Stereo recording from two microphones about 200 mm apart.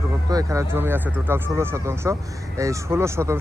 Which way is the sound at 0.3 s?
15° right (ahead or behind).